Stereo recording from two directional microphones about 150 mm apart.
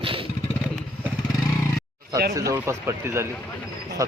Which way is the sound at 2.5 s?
20° right (ahead or behind).